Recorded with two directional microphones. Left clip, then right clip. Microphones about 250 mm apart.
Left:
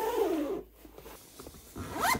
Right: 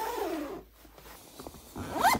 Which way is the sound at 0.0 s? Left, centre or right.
Right.